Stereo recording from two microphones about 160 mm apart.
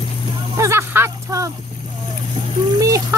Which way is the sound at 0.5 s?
15° right (ahead or behind).